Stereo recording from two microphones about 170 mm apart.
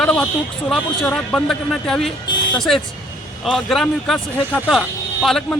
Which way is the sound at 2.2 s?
25° left (ahead or behind).